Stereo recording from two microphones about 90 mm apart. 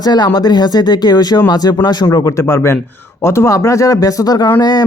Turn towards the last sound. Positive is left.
turn(degrees=50)  # may be behind; listen again after turning